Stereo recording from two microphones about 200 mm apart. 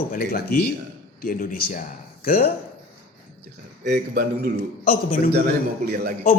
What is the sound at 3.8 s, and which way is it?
Speech, 50° right (ahead or behind).